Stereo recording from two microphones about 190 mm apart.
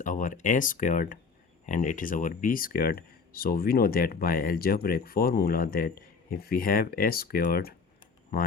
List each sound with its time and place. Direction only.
0.0 s speech: 45° left (ahead or behind)